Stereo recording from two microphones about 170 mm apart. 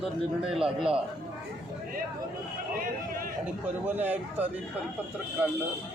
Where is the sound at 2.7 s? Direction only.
55° right (ahead or behind).